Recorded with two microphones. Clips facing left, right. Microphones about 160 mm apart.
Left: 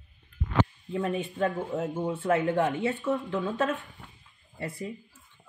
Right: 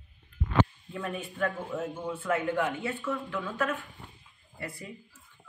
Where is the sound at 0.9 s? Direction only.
20° left (ahead or behind).